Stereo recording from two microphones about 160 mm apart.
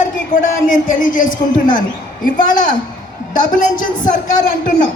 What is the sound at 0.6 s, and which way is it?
A man's voice, 55° left (ahead or behind).